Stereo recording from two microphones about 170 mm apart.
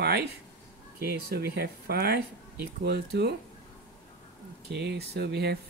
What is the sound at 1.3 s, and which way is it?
Speech, 65° right (ahead or behind).